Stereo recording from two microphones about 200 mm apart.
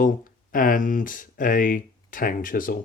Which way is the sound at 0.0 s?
45° left (ahead or behind).